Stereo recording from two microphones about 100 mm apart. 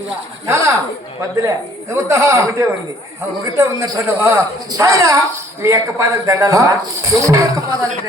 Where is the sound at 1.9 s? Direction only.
30° right (ahead or behind).